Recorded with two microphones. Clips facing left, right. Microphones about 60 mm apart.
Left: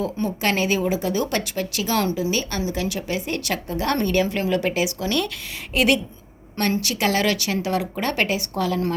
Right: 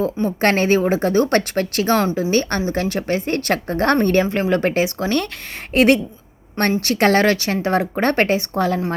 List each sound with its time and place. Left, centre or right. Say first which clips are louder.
0.3 s a woman's voice: right 6 dB; right